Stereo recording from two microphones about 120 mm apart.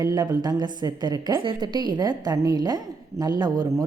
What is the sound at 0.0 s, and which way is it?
A woman's voice, 30° right (ahead or behind).